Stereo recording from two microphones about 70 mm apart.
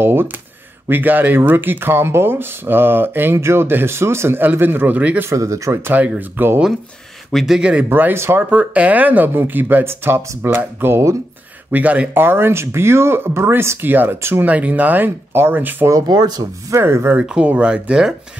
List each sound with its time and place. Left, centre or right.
0.0 s speech: right
5.3 s speech: right
5.7 s speech: right
5.9 s speech: right
7.3 s speech: centre
7.9 s speech: right
11.7 s speech: right
14.4 s speech: right
16.1 s speech: right
16.7 s speech: right
17.2 s speech: centre